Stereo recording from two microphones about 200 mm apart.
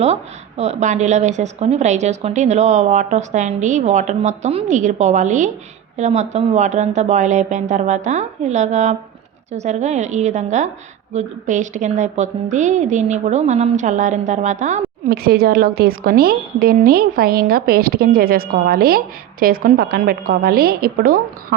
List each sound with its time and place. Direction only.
0.0 s a woman's voice: 30° right (ahead or behind)
15.0 s a woman's voice: 50° right (ahead or behind)